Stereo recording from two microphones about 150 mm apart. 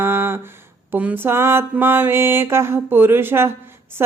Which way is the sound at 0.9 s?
10° right (ahead or behind).